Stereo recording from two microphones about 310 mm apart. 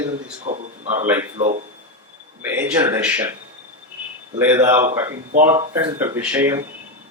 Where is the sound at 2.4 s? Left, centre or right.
Centre.